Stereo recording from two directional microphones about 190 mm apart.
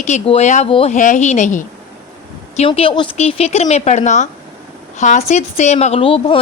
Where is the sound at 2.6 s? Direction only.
30° left (ahead or behind).